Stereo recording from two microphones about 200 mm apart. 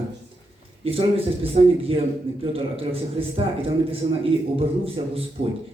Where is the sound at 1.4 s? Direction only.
30° right (ahead or behind).